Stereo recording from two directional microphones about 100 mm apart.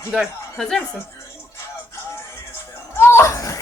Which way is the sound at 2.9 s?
25° left (ahead or behind).